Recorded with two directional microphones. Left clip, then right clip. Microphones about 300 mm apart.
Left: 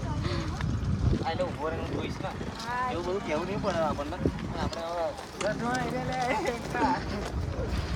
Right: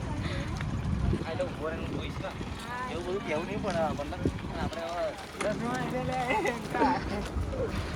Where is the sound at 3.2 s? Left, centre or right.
Left.